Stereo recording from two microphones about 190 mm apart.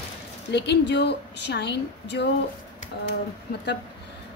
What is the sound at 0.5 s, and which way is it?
Speech, 65° left (ahead or behind).